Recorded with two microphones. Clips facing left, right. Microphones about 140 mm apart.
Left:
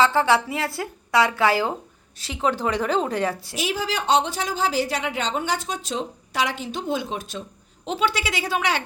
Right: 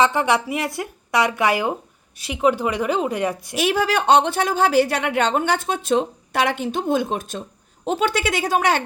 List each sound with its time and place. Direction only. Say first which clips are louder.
0.0 s a woman's voice: even; 20° right (ahead or behind)
3.5 s a woman's voice: right 6 dB; 60° right (ahead or behind); by 8.8 s 45° right (ahead or behind)